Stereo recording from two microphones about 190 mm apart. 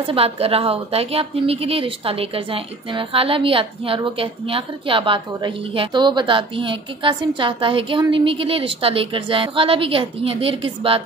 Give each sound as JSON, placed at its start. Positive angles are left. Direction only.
{"t": 0.0, "sound": "a woman's voice", "side_deg": -30}